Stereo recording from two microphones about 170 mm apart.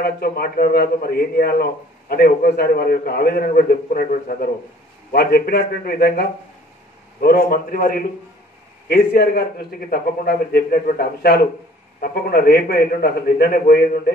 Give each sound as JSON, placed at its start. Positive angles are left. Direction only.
{"t": 0.0, "sound": "a man's voice", "side_deg": 65}